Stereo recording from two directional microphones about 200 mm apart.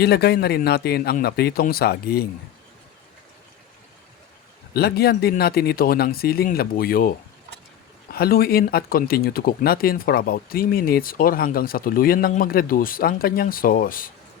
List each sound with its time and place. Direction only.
0.0 s speech: 55° left (ahead or behind)
4.7 s speech: 50° left (ahead or behind)
8.1 s speech: 50° left (ahead or behind)